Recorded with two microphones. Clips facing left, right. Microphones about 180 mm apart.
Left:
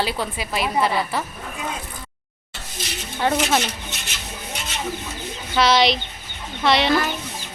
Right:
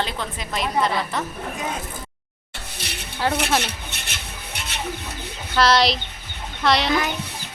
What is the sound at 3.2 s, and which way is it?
Speech, 5° right (ahead or behind).